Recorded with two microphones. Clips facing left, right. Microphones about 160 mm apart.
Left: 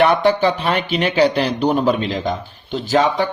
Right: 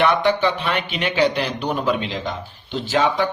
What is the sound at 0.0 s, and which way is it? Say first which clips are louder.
Speech: left 3 dB; 40° left (ahead or behind).